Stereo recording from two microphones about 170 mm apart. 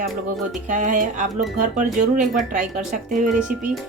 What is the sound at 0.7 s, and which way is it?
Speech, 50° right (ahead or behind).